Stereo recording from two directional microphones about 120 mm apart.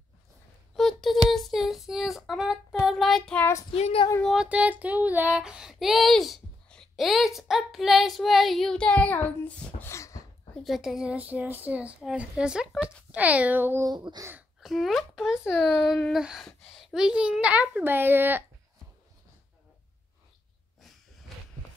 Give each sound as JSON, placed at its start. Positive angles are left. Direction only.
{"t": 0.7, "sound": "a sound", "side_deg": 0}
{"t": 2.9, "sound": "child singing", "side_deg": 0}
{"t": 3.3, "sound": "child singing", "side_deg": 20}
{"t": 3.7, "sound": "speech", "side_deg": 55}
{"t": 4.2, "sound": "child singing", "side_deg": -5}
{"t": 10.5, "sound": "a child's voice", "side_deg": 0}
{"t": 13.8, "sound": "a child's voice", "side_deg": -35}
{"t": 14.6, "sound": "a child's voice", "side_deg": 0}